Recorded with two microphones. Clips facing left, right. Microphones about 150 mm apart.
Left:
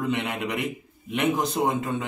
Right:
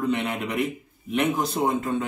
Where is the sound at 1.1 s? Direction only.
15° left (ahead or behind).